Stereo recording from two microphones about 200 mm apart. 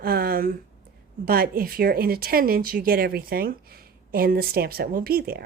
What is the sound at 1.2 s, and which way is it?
Speech, 45° right (ahead or behind).